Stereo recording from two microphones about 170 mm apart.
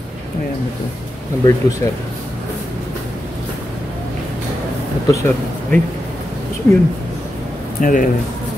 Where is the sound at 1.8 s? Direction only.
15° left (ahead or behind).